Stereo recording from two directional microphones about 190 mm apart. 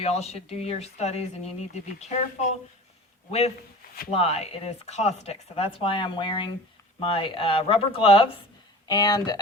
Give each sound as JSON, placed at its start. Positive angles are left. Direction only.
{"t": 0.0, "sound": "speech", "side_deg": 35}
{"t": 4.1, "sound": "speech", "side_deg": 30}